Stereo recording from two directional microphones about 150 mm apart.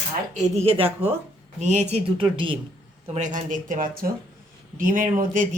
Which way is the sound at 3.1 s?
55° right (ahead or behind).